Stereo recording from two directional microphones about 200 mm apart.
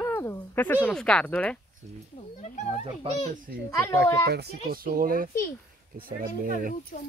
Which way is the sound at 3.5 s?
50° right (ahead or behind).